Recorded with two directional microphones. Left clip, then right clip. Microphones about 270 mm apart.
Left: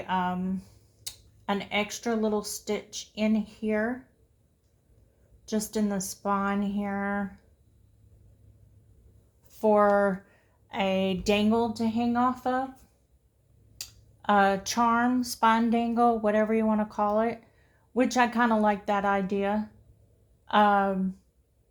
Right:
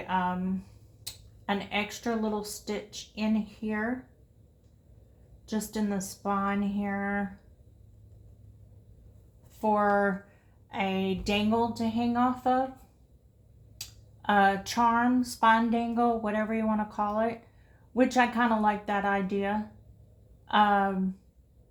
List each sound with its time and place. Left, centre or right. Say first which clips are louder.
0.0 s speech: left 1 dB; left
5.5 s speech: left 3 dB; left
9.5 s speech: left 4 dB; left
13.7 s speech: left 1 dB; left